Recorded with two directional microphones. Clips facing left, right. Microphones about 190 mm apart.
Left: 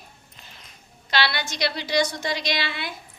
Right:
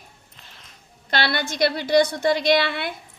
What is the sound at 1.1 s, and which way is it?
A woman's voice, 50° right (ahead or behind).